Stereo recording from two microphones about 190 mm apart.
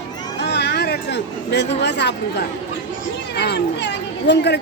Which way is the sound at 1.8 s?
65° left (ahead or behind).